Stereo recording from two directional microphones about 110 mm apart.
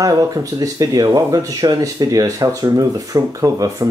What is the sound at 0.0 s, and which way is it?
Speech, 30° right (ahead or behind).